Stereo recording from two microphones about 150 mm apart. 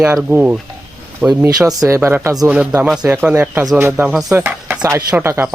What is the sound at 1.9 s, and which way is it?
Speech, 15° right (ahead or behind).